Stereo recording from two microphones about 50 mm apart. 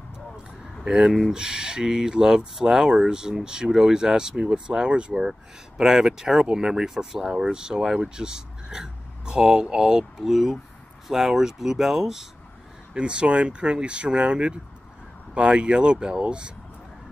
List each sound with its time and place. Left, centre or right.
0.8 s speech: centre
12.9 s speech: centre